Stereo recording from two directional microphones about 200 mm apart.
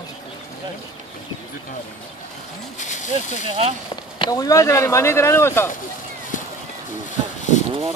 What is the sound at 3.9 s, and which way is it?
Speech, 20° left (ahead or behind).